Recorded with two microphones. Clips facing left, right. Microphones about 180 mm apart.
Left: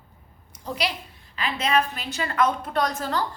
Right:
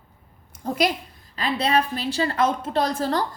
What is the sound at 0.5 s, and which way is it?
Speech, 50° right (ahead or behind).